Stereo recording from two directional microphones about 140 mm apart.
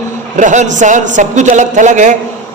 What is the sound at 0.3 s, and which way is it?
A man's voice, 60° right (ahead or behind).